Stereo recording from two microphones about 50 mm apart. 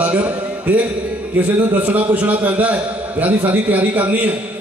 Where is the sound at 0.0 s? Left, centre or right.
Right.